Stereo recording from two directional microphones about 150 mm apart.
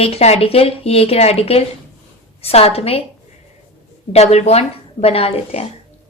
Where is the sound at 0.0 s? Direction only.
45° left (ahead or behind).